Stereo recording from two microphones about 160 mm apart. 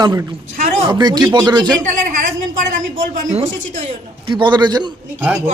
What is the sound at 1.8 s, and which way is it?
A woman's voice, 55° right (ahead or behind).